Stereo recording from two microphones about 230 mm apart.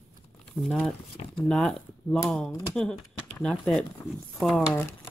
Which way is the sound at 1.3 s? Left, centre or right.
Centre.